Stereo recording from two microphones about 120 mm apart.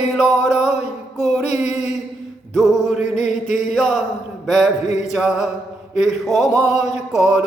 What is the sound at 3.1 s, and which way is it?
Mantra, 90° left.